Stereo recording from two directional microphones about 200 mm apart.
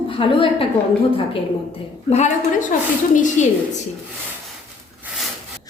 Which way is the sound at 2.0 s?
35° left (ahead or behind).